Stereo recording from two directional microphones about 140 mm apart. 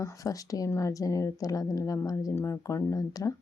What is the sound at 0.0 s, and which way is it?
Speech, 25° left (ahead or behind).